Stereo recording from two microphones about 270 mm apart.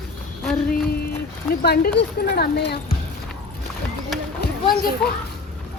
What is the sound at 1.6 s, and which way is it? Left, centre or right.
Speech, left.